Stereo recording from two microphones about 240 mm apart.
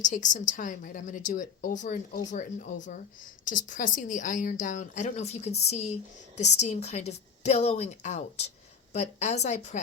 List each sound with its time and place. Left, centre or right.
0.0 s a woman's voice: left